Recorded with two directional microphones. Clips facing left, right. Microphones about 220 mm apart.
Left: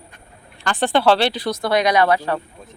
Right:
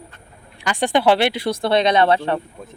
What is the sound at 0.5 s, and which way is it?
Speech, 15° right (ahead or behind).